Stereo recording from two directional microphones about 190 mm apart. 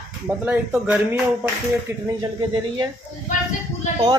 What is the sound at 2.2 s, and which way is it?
Speech, 25° right (ahead or behind).